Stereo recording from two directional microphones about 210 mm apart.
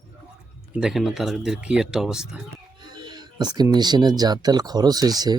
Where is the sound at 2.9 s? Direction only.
20° right (ahead or behind).